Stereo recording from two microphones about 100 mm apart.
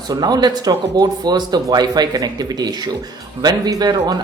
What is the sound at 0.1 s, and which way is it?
Speech, 45° right (ahead or behind).